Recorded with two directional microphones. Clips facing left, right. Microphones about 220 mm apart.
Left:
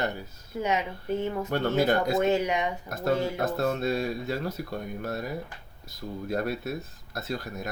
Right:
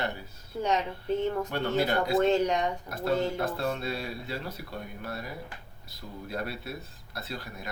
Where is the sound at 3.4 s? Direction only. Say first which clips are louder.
Left 4 dB; 45° left (ahead or behind).